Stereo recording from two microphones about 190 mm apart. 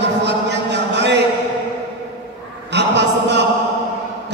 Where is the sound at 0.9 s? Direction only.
65° right (ahead or behind).